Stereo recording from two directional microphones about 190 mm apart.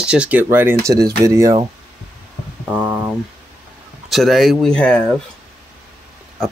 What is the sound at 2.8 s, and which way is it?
Speech, 5° right (ahead or behind).